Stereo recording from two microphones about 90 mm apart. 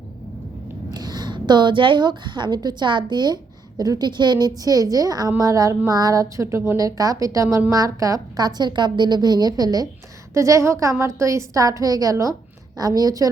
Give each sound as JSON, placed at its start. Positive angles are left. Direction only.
{"t": 0.9, "sound": "a woman's voice", "side_deg": -50}